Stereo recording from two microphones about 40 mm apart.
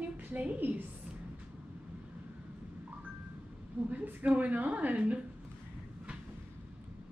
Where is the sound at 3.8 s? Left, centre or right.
Right.